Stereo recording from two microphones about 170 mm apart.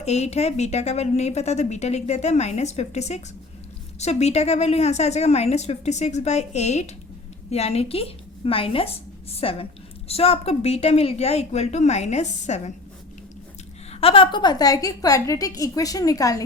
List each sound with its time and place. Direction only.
0.0 s a woman's voice: 40° left (ahead or behind)
13.9 s a woman's voice: 35° left (ahead or behind)